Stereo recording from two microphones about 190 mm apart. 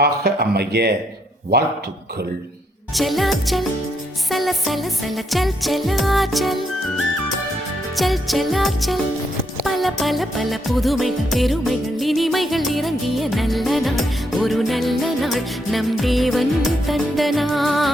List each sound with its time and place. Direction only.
0.0 s speech: 55° right (ahead or behind)
2.9 s music: centre (ahead or behind)
7.9 s music: centre (ahead or behind)